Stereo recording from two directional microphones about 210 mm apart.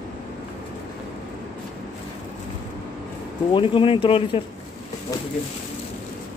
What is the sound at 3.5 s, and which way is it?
Speech, 25° left (ahead or behind).